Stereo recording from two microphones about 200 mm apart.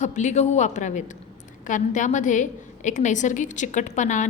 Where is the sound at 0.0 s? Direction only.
35° left (ahead or behind).